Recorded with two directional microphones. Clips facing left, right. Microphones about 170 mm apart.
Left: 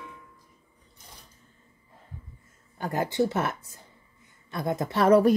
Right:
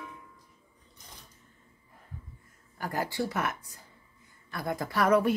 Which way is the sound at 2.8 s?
20° left (ahead or behind).